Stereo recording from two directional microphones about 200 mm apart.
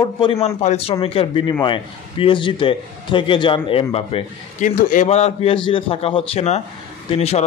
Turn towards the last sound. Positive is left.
turn(degrees=30)  # may be behind; listen again after turning